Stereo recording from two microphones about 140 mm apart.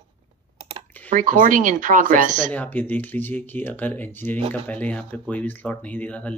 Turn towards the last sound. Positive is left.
turn(degrees=10)  # may be behind; listen again after turning